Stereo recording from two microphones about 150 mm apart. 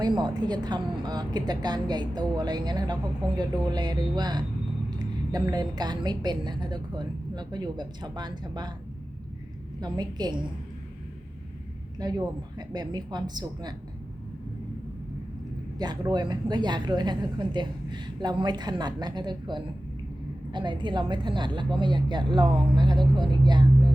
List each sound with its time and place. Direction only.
0.0 s a woman's voice: 30° right (ahead or behind)
9.8 s a woman's voice: 30° right (ahead or behind)
11.9 s a woman's voice: 25° right (ahead or behind)
15.8 s a woman's voice: 30° right (ahead or behind)